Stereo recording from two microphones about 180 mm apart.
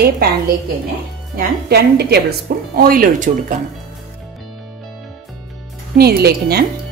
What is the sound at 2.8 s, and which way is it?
Speech, 50° right (ahead or behind).